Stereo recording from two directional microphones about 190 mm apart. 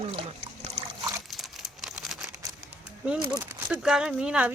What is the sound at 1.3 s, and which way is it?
Crumpling, centre (ahead or behind).